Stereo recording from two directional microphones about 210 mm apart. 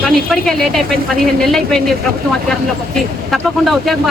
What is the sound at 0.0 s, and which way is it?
Speech, centre (ahead or behind).